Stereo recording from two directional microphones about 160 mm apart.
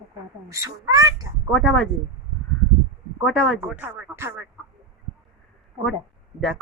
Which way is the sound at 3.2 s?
Centre (ahead or behind).